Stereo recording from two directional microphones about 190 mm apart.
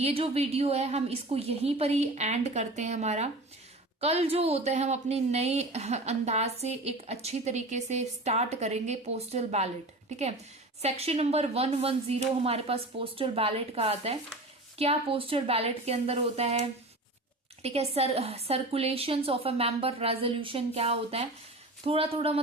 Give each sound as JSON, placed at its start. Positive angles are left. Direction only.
{"t": 0.0, "sound": "a woman's voice", "side_deg": -30}
{"t": 10.8, "sound": "a woman's voice", "side_deg": -35}